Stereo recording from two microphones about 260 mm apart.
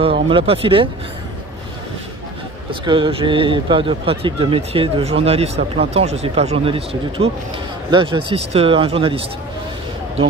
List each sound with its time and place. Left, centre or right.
0.3 s speech: right
2.7 s speech: centre